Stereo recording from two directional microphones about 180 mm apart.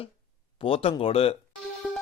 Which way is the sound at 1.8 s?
5° right (ahead or behind).